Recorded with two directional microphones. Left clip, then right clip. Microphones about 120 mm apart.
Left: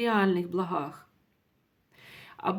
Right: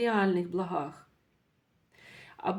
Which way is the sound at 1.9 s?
25° left (ahead or behind).